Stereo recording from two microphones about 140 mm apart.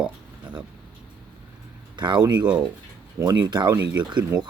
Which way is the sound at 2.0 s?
35° right (ahead or behind).